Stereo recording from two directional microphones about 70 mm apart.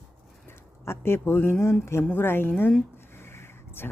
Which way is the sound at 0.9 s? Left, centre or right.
Left.